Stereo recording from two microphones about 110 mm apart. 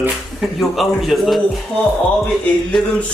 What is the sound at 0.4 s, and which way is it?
Speech, centre (ahead or behind).